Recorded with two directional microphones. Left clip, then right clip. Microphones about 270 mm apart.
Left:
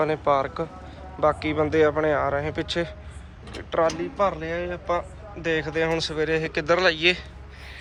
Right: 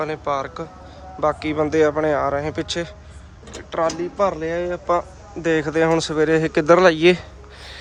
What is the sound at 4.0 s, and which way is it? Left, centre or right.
Speech, right.